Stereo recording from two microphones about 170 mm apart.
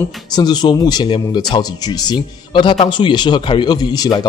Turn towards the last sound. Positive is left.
turn(degrees=25)  # may be behind; listen again after turning